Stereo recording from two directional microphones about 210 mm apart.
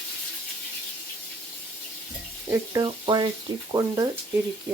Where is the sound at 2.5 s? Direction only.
20° right (ahead or behind).